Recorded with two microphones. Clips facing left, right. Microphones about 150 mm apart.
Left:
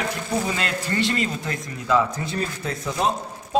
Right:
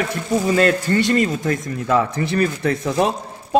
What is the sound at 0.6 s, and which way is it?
Speech, 45° right (ahead or behind).